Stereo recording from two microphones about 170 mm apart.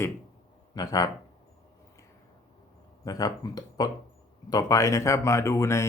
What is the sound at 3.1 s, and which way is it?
Speech, 20° left (ahead or behind).